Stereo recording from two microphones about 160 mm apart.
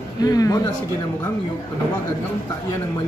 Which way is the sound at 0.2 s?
20° left (ahead or behind).